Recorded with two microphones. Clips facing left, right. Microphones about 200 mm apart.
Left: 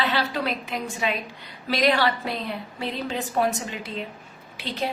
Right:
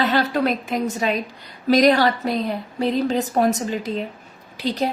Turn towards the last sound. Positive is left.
turn(degrees=-40)  # may be behind; listen again after turning